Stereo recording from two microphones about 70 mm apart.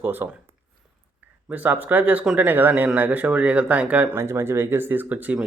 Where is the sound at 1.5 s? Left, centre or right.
Right.